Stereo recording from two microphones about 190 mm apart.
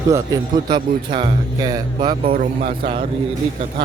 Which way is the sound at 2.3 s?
50° right (ahead or behind).